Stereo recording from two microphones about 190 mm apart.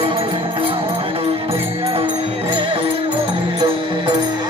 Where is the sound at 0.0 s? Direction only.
25° right (ahead or behind).